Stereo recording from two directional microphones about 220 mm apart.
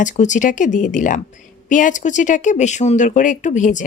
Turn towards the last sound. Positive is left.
turn(degrees=35)  # may be behind; listen again after turning